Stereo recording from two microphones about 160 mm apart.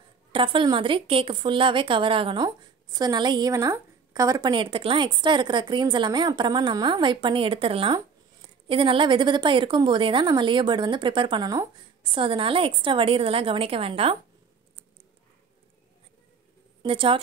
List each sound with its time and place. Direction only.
0.3 s a woman's voice: 30° right (ahead or behind)
16.8 s a woman's voice: 35° right (ahead or behind)